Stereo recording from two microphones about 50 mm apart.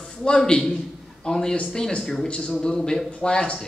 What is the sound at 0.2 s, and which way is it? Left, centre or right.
A man's voice, centre.